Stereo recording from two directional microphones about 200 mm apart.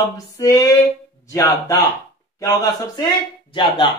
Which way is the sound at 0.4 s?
15° left (ahead or behind).